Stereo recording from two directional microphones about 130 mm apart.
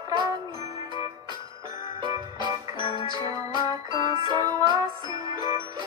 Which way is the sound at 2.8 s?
40° left (ahead or behind).